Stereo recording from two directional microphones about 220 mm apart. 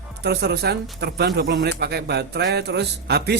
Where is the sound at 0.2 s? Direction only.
50° right (ahead or behind).